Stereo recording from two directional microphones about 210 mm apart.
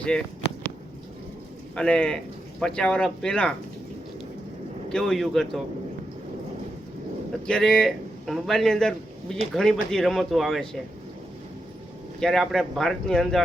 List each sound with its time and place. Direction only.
0.0 s a sound: 5° left (ahead or behind)
1.7 s speech: 5° left (ahead or behind)
4.9 s speech: centre (ahead or behind)
7.4 s a man's voice: 5° left (ahead or behind)
12.2 s speech: centre (ahead or behind)